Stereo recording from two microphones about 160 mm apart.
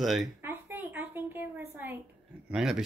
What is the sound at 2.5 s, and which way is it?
Speech, centre (ahead or behind).